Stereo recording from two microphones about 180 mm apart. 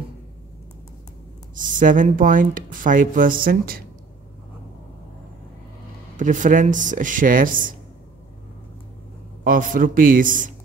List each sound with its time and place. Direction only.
1.5 s speech: 45° right (ahead or behind)
6.1 s speech: 45° right (ahead or behind)
9.4 s speech: 50° right (ahead or behind)